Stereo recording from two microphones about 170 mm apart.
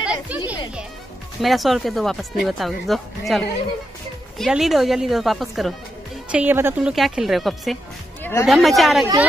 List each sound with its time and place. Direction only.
0.0 s music: 5° right (ahead or behind)
1.4 s speech: centre (ahead or behind)
6.3 s speech: 10° right (ahead or behind)
8.2 s a sound: 15° left (ahead or behind)
8.5 s speech: centre (ahead or behind)